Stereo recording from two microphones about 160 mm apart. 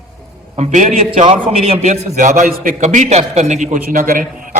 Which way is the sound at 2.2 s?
50° right (ahead or behind).